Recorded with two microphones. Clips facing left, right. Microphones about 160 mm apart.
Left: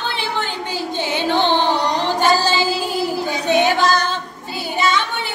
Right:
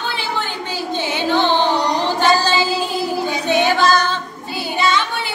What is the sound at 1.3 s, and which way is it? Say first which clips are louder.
Carnatic music: right 1 dB; 15° left (ahead or behind).